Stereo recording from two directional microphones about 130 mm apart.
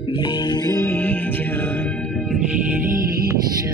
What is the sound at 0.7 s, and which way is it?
Music, 20° left (ahead or behind).